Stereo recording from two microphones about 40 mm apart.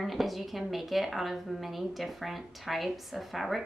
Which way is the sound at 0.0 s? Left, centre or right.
Centre.